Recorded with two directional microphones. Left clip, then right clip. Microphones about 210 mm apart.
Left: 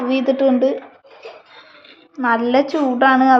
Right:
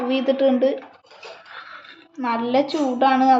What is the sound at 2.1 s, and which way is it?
A woman's voice, 15° left (ahead or behind).